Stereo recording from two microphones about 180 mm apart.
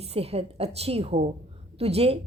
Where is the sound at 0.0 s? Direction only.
35° right (ahead or behind).